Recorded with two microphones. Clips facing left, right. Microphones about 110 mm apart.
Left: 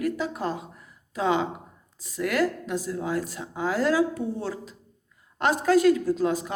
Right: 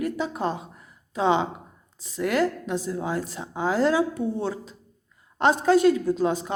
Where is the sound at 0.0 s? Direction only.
25° right (ahead or behind).